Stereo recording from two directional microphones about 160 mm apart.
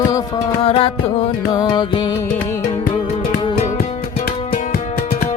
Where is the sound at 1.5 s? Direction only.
25° left (ahead or behind).